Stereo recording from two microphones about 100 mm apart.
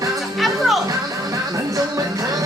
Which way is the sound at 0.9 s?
35° right (ahead or behind).